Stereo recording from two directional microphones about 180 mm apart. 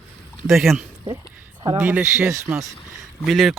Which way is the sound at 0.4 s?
Centre (ahead or behind).